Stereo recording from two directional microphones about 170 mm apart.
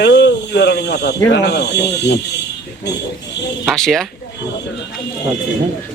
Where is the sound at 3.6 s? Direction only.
Centre (ahead or behind).